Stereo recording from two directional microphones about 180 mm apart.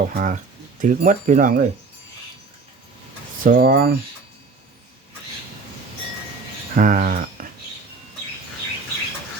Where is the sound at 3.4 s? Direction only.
50° right (ahead or behind).